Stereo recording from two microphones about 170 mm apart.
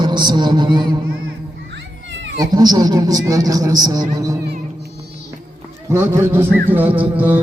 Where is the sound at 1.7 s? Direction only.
90° right.